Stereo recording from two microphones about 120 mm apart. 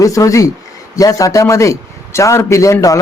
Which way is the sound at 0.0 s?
25° left (ahead or behind).